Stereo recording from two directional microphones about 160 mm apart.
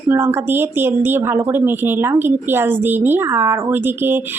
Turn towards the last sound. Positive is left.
turn(degrees=-15)  # may be behind; listen again after turning